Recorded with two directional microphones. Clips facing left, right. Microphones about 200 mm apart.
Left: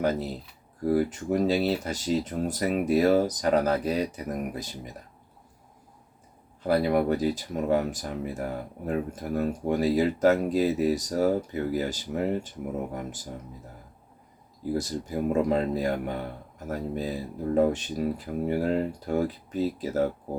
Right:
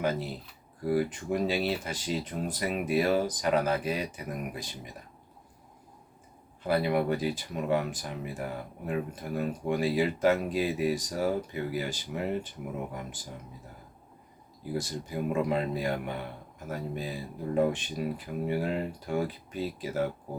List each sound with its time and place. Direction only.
0.0 s speech: 40° left (ahead or behind)
6.6 s speech: 40° left (ahead or behind)
14.7 s speech: 40° left (ahead or behind)